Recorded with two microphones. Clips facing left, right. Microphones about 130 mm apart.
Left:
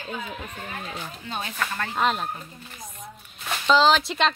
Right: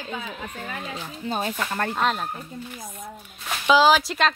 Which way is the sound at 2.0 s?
Centre (ahead or behind).